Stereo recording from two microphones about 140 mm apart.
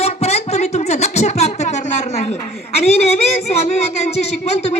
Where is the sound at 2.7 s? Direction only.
50° left (ahead or behind).